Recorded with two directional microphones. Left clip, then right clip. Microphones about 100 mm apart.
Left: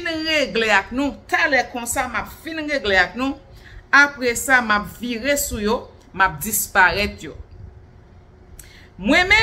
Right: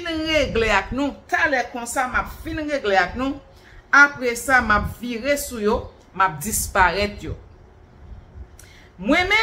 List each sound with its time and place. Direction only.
0.0 s a woman's voice: 20° left (ahead or behind)
1.3 s a woman's voice: 30° left (ahead or behind)
9.0 s a woman's voice: 20° left (ahead or behind)